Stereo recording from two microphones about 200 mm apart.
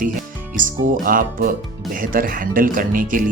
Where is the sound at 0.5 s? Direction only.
45° right (ahead or behind).